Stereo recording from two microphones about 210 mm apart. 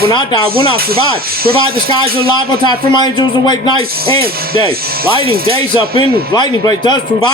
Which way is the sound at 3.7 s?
25° right (ahead or behind).